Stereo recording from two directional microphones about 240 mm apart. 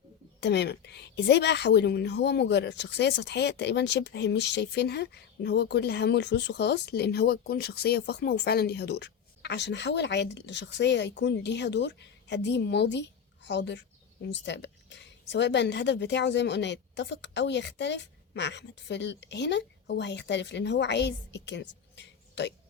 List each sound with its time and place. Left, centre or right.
0.3 s a woman's voice: left